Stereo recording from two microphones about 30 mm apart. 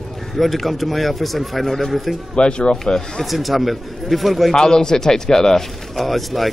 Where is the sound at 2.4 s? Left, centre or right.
Left.